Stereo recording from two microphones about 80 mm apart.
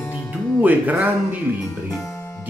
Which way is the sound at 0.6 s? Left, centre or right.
Right.